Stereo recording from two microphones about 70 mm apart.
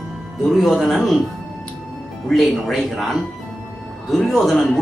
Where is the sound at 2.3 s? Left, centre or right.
Centre.